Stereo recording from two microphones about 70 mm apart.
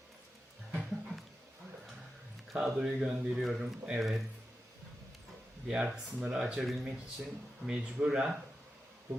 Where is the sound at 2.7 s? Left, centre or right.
Centre.